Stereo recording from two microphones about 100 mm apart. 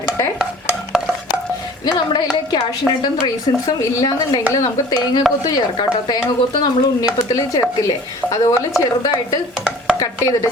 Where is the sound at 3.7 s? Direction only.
35° left (ahead or behind).